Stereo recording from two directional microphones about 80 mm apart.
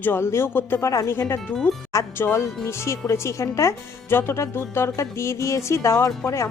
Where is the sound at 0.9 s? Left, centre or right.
Left.